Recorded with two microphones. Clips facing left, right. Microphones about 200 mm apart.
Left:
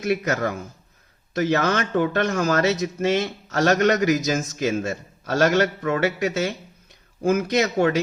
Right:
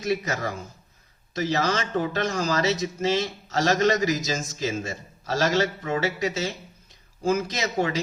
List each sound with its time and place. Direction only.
0.0 s a man's voice: 60° left (ahead or behind)